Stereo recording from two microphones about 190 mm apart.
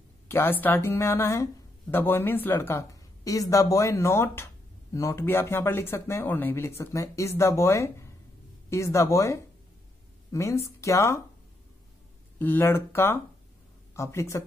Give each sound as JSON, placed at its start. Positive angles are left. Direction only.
{"t": 0.3, "sound": "speech", "side_deg": 10}
{"t": 12.4, "sound": "speech", "side_deg": 10}